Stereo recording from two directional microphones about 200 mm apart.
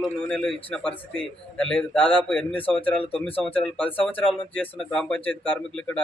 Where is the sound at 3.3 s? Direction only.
25° left (ahead or behind).